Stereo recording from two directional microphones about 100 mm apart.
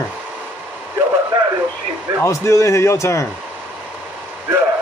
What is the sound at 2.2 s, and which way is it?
A man's voice, 30° left (ahead or behind).